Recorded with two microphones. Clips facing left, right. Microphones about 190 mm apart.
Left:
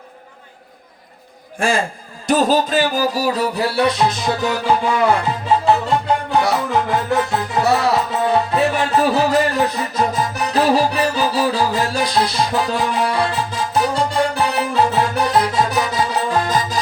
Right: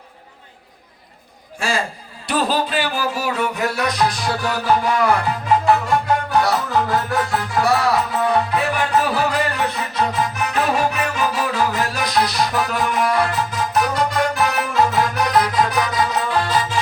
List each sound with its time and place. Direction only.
1.5 s a man's voice: 50° left (ahead or behind)
2.2 s music: 45° left (ahead or behind); by 9.4 s 25° left (ahead or behind)
9.9 s music: 35° left (ahead or behind)